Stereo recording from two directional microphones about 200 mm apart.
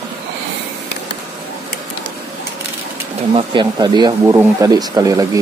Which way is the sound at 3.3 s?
25° right (ahead or behind).